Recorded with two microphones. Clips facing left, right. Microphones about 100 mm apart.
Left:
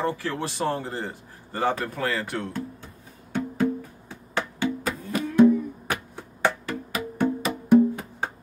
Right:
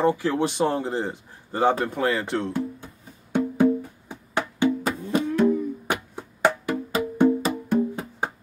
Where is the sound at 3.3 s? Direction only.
20° right (ahead or behind).